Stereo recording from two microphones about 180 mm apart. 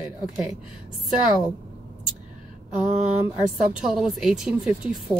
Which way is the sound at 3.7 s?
5° right (ahead or behind).